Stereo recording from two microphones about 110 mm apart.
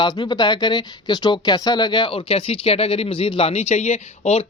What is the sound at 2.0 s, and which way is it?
Speech, 60° left (ahead or behind).